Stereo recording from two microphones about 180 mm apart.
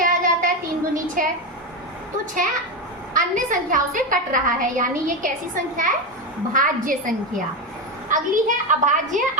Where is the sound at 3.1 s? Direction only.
45° right (ahead or behind).